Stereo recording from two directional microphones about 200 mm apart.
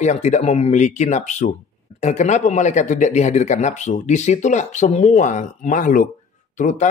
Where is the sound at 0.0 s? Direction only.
35° left (ahead or behind).